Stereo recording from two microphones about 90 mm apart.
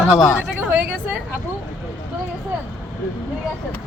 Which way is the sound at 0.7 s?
20° right (ahead or behind).